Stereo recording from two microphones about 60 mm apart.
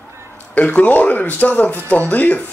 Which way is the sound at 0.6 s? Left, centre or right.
Left.